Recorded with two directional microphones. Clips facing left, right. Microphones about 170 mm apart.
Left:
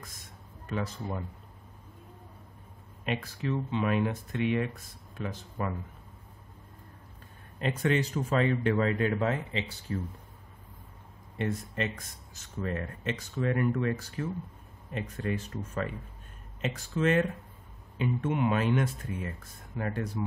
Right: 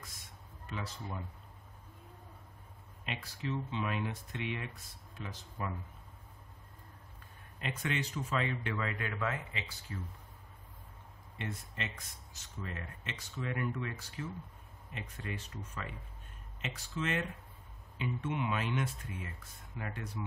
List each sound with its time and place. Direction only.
0.7 s speech: 50° left (ahead or behind)
3.1 s speech: 55° left (ahead or behind)
7.5 s a man's voice: 40° left (ahead or behind)
11.3 s speech: 45° left (ahead or behind)
12.5 s speech: 55° left (ahead or behind)